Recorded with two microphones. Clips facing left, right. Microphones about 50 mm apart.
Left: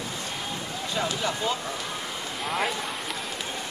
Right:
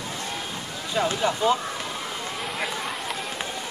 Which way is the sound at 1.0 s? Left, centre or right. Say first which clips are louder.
Right 5 dB; centre.